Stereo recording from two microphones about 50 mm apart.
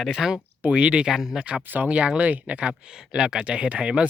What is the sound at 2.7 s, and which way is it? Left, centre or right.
Speech, centre.